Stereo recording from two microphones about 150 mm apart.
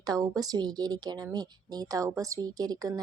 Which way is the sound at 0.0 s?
25° right (ahead or behind).